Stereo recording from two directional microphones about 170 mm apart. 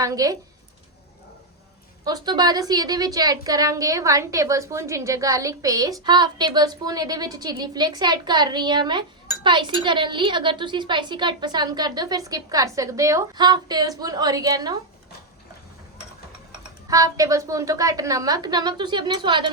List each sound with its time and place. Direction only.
0.0 s a woman's voice: 20° right (ahead or behind)
2.0 s a woman's voice: 25° right (ahead or behind)
16.5 s a woman's voice: 20° right (ahead or behind)